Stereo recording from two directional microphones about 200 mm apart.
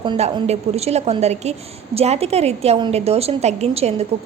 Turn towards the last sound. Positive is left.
turn(degrees=-30)  # may be behind; listen again after turning